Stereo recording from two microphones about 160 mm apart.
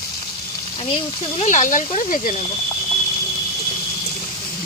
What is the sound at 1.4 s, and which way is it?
Speech, 50° left (ahead or behind).